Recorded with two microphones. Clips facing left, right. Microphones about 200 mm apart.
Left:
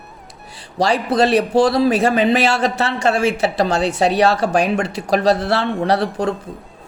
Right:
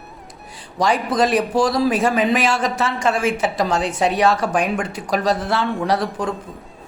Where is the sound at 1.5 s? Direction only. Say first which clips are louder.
Left 6 dB; 65° left (ahead or behind).